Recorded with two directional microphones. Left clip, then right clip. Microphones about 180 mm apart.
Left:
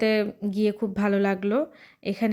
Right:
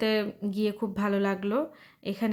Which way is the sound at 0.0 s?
15° left (ahead or behind).